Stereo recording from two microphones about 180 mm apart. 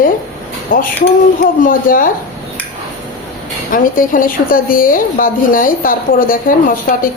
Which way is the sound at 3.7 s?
50° left (ahead or behind).